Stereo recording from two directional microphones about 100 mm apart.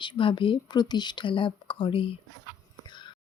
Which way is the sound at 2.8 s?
50° left (ahead or behind).